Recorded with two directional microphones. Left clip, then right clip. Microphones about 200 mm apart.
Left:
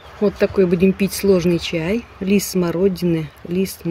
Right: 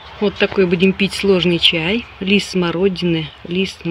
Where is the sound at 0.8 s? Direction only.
40° right (ahead or behind).